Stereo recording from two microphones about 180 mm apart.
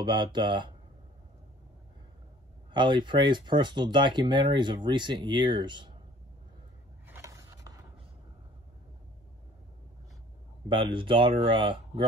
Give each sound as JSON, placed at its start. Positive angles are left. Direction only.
{"t": 0.0, "sound": "speech", "side_deg": -25}
{"t": 2.7, "sound": "speech", "side_deg": -25}
{"t": 7.1, "sound": "a sound", "side_deg": -15}
{"t": 10.7, "sound": "speech", "side_deg": -30}